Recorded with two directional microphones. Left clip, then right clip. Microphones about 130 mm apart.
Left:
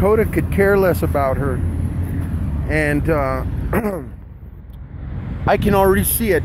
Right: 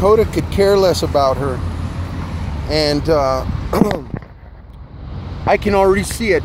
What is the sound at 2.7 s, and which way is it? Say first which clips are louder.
Speech: right 3 dB; 50° right (ahead or behind).